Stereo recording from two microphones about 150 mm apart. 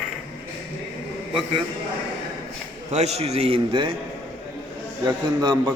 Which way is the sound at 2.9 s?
45° right (ahead or behind).